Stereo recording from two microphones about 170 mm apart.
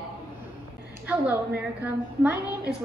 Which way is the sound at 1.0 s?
10° right (ahead or behind).